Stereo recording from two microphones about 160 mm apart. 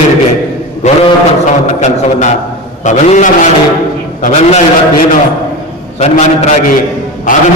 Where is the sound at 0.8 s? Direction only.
50° left (ahead or behind).